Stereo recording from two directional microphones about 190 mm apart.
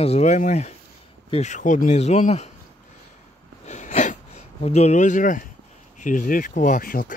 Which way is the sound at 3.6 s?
40° left (ahead or behind).